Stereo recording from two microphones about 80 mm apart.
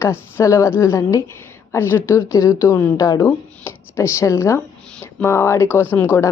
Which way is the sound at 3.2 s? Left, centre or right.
Left.